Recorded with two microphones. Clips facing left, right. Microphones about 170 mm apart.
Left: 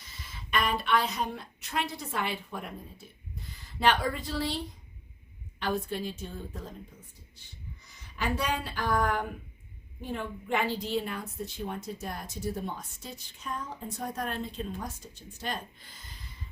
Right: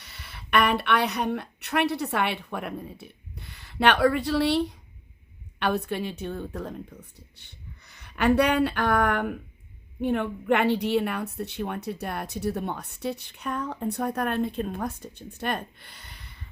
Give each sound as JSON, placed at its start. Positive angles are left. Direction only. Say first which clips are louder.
{"t": 0.0, "sound": "a woman's voice", "louder": "right 1 dB", "side_deg": -70}